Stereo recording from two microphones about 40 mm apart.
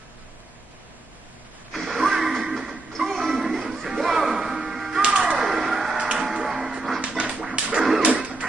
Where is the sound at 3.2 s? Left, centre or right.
Centre.